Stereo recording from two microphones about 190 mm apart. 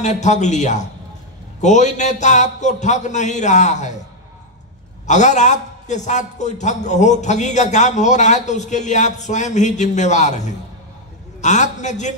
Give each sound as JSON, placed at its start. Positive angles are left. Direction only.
{"t": 0.0, "sound": "a man's voice", "side_deg": 40}
{"t": 5.0, "sound": "a man's voice", "side_deg": 40}